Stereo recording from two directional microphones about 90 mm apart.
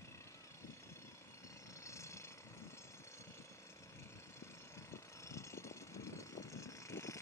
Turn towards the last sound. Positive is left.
turn(degrees=35)  # may be behind; listen again after turning